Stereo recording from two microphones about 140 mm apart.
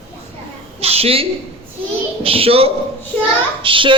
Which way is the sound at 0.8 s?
45° right (ahead or behind).